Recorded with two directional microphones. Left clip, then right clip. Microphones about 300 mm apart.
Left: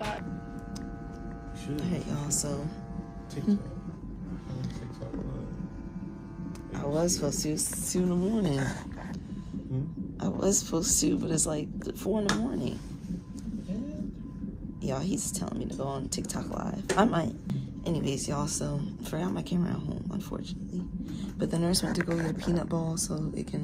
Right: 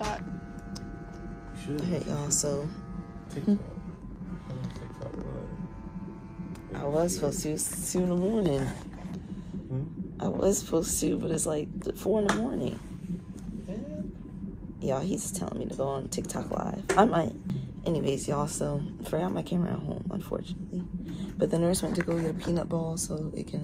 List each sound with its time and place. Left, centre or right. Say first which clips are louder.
1.8 s speech: right 3 dB; centre
6.7 s speech: right 1 dB; centre
10.2 s a woman's voice: right 2 dB; centre
14.8 s speech: right 3 dB; centre